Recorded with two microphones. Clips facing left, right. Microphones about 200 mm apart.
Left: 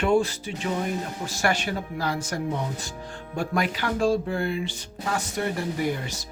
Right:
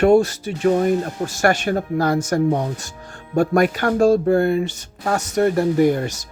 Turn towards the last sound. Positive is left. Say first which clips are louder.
# right 11 dB
turn(degrees=-45)  # may be behind; listen again after turning